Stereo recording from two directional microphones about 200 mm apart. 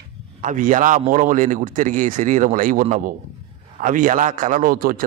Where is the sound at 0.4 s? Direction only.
40° right (ahead or behind).